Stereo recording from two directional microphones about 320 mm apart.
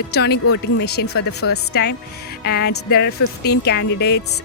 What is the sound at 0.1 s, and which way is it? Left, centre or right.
Speech, left.